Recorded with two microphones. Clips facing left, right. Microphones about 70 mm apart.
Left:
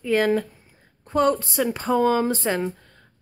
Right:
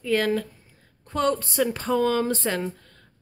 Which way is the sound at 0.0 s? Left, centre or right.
Centre.